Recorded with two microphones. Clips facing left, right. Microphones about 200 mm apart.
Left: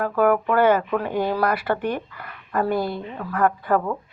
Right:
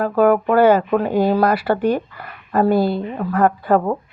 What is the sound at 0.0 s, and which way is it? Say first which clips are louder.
A woman's voice: right 4 dB; 30° right (ahead or behind).